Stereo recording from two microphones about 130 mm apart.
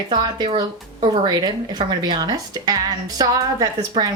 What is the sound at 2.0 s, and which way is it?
A woman's voice, 30° right (ahead or behind).